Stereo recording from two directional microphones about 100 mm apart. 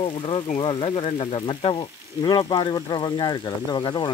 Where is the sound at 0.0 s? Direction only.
65° left (ahead or behind).